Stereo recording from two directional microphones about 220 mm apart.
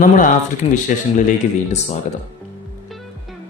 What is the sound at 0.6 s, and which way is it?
Speech, 25° left (ahead or behind).